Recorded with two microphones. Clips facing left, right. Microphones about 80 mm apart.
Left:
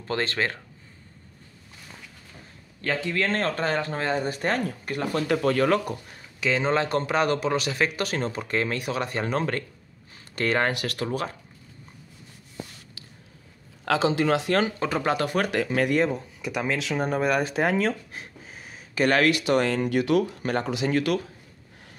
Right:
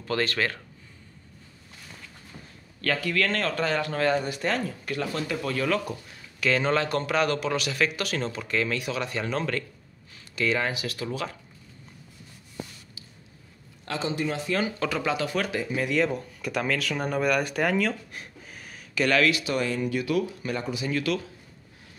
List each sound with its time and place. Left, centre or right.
0.0 s speech: left
2.8 s speech: left
4.3 s speech: left
6.4 s speech: left
11.1 s speech: left
13.9 s speech: left
14.8 s speech: left
15.6 s speech: left
15.9 s speech: left
16.3 s speech: centre; by 20.9 s left
20.9 s speech: left